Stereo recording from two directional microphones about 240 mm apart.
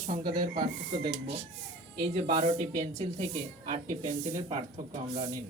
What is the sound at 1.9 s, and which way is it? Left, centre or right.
Speech, right.